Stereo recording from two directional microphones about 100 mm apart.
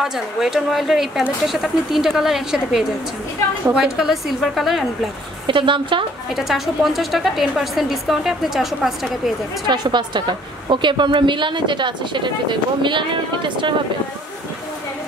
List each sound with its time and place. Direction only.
0.0 s a woman's voice: 5° right (ahead or behind)
5.5 s speech: 55° right (ahead or behind)
6.3 s a woman's voice: centre (ahead or behind)
9.7 s speech: 50° right (ahead or behind)